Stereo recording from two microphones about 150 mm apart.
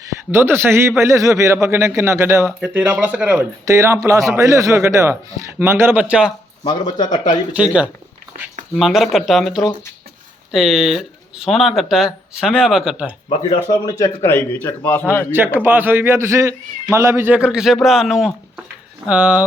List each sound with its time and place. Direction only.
0.3 s a man's voice: 15° right (ahead or behind)
3.7 s a man's voice: 20° right (ahead or behind)
6.7 s a man's voice: 30° left (ahead or behind)
7.5 s a man's voice: 10° right (ahead or behind)
13.5 s a man's voice: 25° left (ahead or behind)
15.5 s a man's voice: 10° right (ahead or behind)